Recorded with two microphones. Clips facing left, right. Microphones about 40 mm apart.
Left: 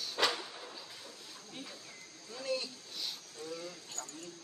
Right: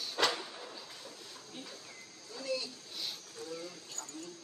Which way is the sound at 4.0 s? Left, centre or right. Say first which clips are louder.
Left 2 dB; left.